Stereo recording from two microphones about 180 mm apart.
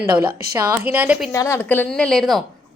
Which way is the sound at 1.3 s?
15° left (ahead or behind).